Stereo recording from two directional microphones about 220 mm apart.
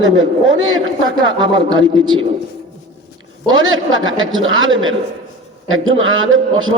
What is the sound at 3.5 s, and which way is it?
Speech, 65° right (ahead or behind).